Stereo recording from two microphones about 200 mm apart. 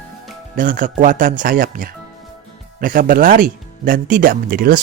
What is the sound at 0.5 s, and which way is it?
Speech, 45° right (ahead or behind).